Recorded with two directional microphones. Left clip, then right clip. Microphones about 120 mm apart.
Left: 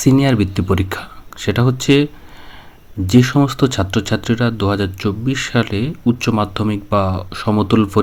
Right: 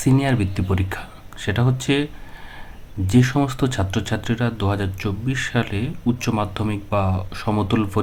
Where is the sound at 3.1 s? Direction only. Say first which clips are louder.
Left 5 dB; 30° left (ahead or behind).